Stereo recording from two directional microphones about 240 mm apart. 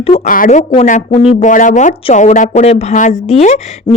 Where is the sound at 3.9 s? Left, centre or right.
Centre.